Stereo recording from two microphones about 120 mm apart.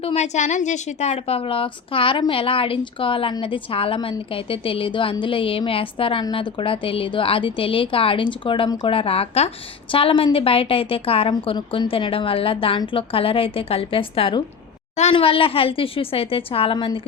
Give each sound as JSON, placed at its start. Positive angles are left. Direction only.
{"t": 0.0, "sound": "a woman's voice", "side_deg": 65}
{"t": 9.9, "sound": "a woman's voice", "side_deg": 45}